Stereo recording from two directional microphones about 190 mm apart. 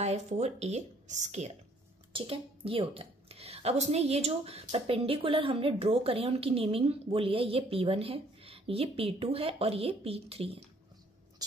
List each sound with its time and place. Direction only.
0.0 s a woman's voice: 35° right (ahead or behind)